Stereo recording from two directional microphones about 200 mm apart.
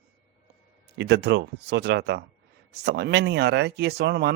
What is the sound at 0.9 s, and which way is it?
Speech, 55° right (ahead or behind).